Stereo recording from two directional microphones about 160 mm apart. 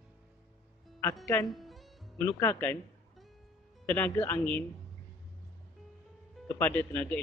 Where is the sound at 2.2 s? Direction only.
15° left (ahead or behind).